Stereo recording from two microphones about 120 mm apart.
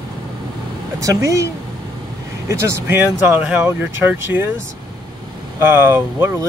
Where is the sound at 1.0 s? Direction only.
25° right (ahead or behind).